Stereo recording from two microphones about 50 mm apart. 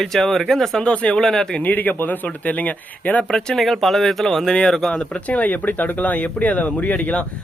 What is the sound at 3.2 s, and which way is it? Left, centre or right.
Speech, centre.